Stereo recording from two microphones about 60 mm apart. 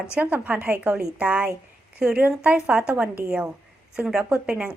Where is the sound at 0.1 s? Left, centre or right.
Right.